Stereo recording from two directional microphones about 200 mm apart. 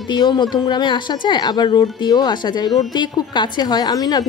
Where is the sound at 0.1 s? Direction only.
20° left (ahead or behind).